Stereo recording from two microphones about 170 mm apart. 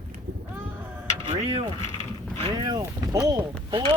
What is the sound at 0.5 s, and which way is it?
Sheep, 10° right (ahead or behind).